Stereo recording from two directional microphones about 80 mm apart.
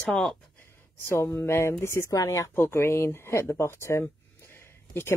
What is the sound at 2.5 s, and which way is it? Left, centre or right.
Speech, left.